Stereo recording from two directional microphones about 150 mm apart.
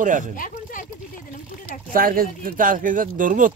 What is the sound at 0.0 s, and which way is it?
Speech, 60° right (ahead or behind).